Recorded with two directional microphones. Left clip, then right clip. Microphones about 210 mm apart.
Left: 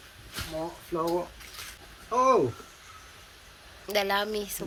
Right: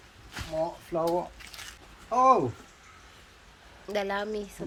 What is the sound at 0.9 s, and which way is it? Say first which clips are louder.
Speech: even; 30° right (ahead or behind).